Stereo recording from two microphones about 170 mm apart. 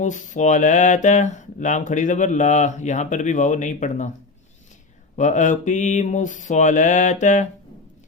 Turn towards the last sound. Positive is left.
turn(degrees=45)  # may be behind; listen again after turning